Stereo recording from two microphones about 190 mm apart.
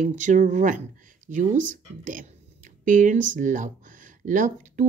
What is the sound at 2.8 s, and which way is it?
Speech, 45° right (ahead or behind).